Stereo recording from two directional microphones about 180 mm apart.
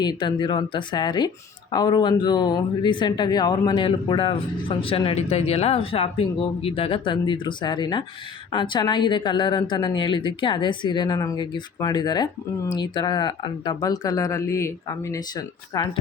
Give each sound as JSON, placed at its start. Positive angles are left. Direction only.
{"t": 0.0, "sound": "speech", "side_deg": 25}